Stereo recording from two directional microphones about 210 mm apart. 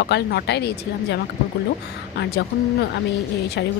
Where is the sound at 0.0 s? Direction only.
50° left (ahead or behind).